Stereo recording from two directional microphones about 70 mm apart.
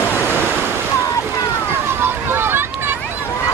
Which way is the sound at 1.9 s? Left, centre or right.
Right.